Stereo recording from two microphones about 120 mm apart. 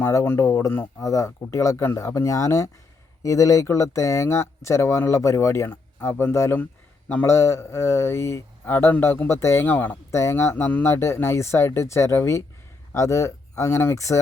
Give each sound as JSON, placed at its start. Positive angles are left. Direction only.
{"t": 0.0, "sound": "speech", "side_deg": 20}